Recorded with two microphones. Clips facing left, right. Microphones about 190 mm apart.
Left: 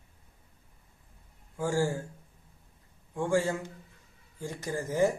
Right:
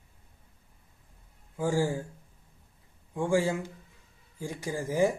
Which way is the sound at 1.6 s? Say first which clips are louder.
Right 1 dB; 15° right (ahead or behind).